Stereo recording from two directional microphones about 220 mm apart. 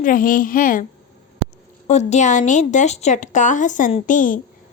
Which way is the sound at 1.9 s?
30° left (ahead or behind).